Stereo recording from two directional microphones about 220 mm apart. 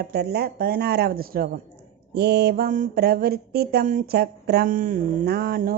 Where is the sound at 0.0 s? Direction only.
45° right (ahead or behind).